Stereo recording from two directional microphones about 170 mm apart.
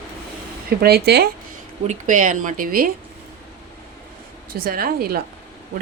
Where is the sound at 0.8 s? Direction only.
70° right (ahead or behind).